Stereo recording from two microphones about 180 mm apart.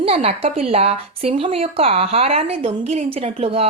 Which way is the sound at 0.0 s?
35° right (ahead or behind).